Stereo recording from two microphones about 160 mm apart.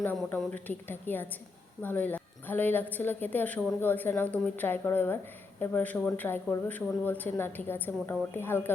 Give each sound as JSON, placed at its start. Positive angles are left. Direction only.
{"t": 0.3, "sound": "a woman's voice", "side_deg": 10}